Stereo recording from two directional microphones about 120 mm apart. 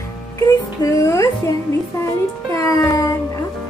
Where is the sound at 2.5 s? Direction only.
25° left (ahead or behind).